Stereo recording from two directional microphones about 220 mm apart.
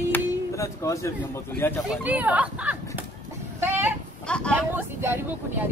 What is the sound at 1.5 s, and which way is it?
Speech, 10° left (ahead or behind).